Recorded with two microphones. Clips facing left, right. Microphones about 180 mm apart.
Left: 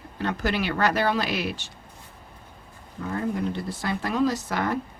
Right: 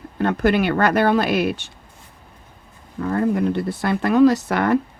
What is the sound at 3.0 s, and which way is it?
Speech, 60° right (ahead or behind).